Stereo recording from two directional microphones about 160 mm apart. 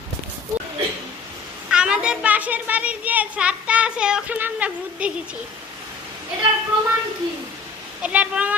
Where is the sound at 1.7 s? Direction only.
5° right (ahead or behind).